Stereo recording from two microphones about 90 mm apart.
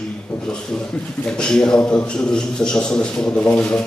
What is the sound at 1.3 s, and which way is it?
A man's voice, 10° left (ahead or behind).